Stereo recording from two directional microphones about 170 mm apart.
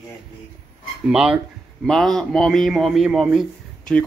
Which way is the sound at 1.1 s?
5° right (ahead or behind).